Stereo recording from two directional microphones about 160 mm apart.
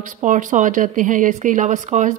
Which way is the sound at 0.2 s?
50° right (ahead or behind).